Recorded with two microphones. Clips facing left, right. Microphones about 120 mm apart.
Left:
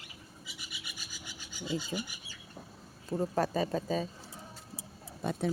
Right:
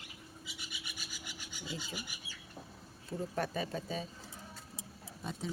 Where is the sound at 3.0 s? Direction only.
45° left (ahead or behind).